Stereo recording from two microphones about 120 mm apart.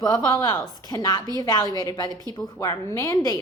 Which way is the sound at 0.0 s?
30° left (ahead or behind).